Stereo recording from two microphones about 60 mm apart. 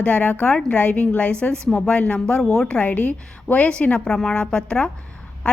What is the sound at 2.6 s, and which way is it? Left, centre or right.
Speech, centre.